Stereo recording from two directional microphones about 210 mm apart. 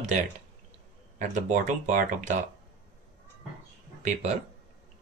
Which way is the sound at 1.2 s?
35° right (ahead or behind).